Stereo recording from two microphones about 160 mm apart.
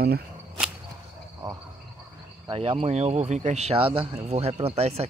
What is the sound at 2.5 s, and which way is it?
Speech, 35° right (ahead or behind).